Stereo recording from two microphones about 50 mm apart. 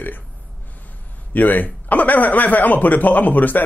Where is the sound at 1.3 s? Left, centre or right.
Left.